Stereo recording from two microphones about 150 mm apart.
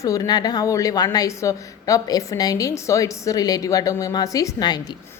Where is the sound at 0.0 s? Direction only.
25° left (ahead or behind).